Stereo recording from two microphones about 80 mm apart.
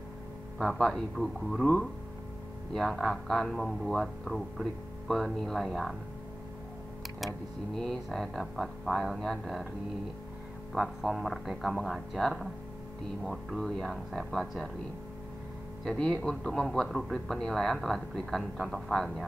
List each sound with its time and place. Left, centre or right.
0.6 s speech: centre
2.7 s speech: centre
7.7 s speech: centre
10.7 s speech: centre
15.8 s speech: centre